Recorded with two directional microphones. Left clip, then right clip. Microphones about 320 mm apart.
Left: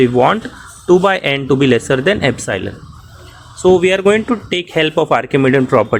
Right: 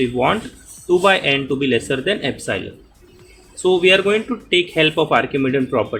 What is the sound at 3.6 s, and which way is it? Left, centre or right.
Speech, left.